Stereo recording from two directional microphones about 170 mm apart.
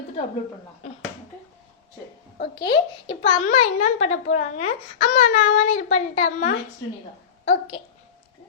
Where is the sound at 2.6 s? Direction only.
25° left (ahead or behind).